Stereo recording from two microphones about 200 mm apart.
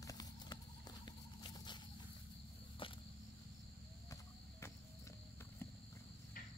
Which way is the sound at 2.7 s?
25° left (ahead or behind).